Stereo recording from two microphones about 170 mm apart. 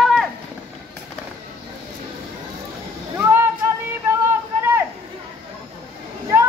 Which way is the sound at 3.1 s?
15° right (ahead or behind).